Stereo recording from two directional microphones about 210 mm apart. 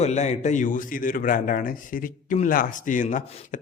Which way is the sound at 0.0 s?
30° left (ahead or behind).